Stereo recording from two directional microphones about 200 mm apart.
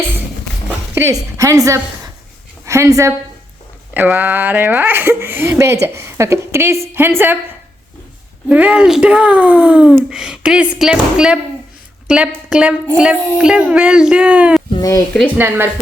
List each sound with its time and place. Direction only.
0.9 s a woman's voice: 15° right (ahead or behind)
8.4 s speech: 5° right (ahead or behind)
14.8 s speech: 15° left (ahead or behind)
15.4 s speech: 10° right (ahead or behind)